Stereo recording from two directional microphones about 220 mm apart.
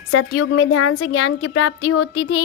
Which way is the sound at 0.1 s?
65° left (ahead or behind).